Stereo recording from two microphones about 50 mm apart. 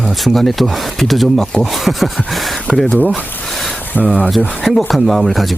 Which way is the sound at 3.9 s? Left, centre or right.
Left.